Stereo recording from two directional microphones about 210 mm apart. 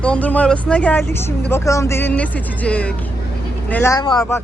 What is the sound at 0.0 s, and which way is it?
Speech, 5° left (ahead or behind).